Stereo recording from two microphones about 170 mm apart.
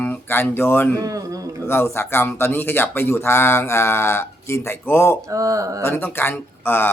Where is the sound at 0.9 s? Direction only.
20° right (ahead or behind).